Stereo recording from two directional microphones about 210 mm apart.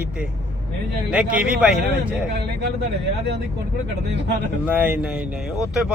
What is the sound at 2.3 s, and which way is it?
Speech, 50° right (ahead or behind).